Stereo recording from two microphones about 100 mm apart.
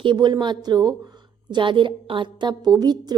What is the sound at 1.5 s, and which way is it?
A woman's voice, 55° right (ahead or behind).